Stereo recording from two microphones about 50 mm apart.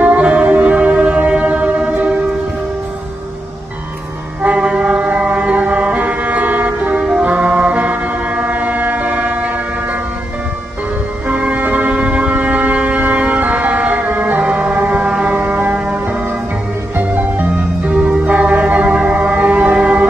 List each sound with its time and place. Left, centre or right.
0.0 s music: right
4.4 s music: right
7.0 s music: right
7.8 s foghorn: right
11.2 s music: right
12.4 s a sound: right
13.3 s music: right
14.4 s a sound: right
15.3 s foghorn: right
15.7 s music: centre
17.0 s music: right
17.8 s music: right